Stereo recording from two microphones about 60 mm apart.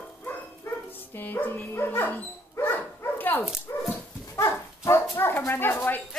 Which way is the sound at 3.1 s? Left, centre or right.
Left.